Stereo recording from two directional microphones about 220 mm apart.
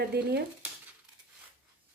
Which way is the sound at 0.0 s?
45° right (ahead or behind).